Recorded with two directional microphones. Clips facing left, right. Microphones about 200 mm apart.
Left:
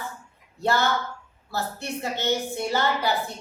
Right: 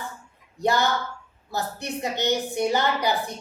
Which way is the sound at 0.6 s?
15° right (ahead or behind).